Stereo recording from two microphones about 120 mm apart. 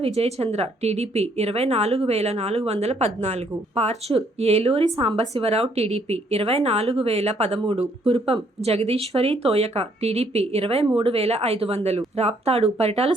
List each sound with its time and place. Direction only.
0.0 s speech: 60° right (ahead or behind)